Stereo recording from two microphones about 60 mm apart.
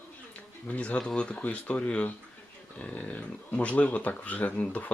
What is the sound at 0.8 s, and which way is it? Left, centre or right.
Speech, left.